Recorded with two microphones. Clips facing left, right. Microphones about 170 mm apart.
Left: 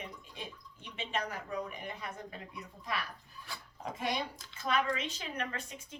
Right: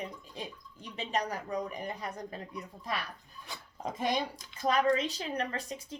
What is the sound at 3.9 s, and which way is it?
Speech, 35° right (ahead or behind).